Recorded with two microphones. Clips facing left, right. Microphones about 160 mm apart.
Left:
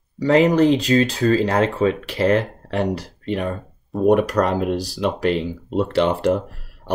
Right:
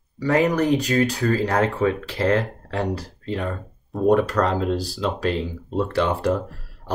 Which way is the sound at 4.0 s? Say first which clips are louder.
Left 2 dB; 15° left (ahead or behind).